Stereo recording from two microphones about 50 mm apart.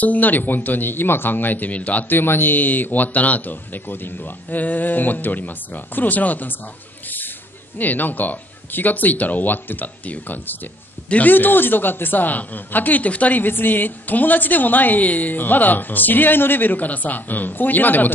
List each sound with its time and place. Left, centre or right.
0.0 s a woman's voice: left
2.1 s a woman's voice: left
7.7 s a woman's voice: left